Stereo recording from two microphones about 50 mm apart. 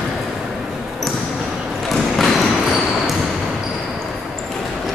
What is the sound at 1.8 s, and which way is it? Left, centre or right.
Basketball bounce, centre.